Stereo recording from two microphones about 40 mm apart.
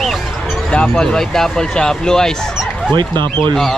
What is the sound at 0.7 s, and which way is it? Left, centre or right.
Speech, centre.